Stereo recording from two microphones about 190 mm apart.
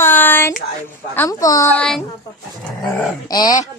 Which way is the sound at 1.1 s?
15° left (ahead or behind).